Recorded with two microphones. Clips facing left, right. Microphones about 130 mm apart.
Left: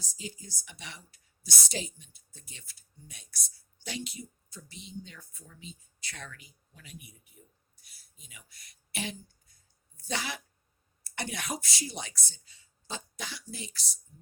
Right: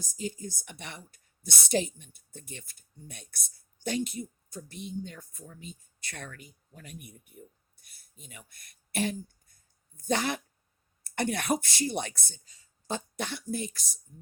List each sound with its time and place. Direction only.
0.0 s a woman's voice: 50° right (ahead or behind)
12.5 s a sound: 40° right (ahead or behind)
13.1 s a woman's voice: 55° right (ahead or behind)